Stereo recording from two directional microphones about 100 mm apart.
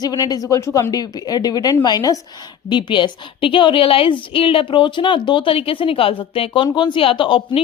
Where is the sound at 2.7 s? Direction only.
50° left (ahead or behind).